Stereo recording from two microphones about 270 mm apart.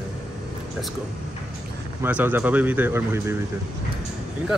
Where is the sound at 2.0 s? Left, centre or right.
Centre.